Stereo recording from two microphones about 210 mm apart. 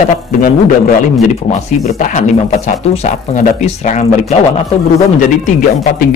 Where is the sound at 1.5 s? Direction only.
35° left (ahead or behind).